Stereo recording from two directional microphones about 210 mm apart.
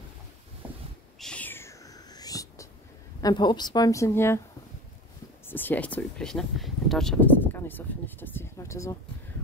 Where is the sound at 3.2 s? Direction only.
20° left (ahead or behind).